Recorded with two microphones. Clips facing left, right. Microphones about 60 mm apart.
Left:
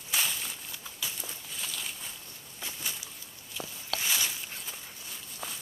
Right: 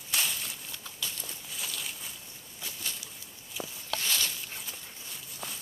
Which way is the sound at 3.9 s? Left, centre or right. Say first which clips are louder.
Even; centre.